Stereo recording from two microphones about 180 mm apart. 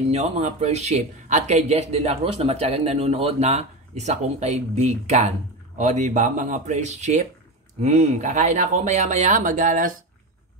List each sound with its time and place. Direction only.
0.1 s a man's voice: 40° right (ahead or behind)